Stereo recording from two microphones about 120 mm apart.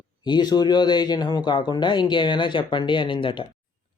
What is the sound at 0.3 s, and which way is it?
Speech, 35° left (ahead or behind).